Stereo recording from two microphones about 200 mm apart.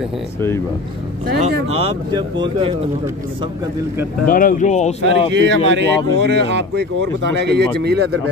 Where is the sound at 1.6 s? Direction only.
30° right (ahead or behind).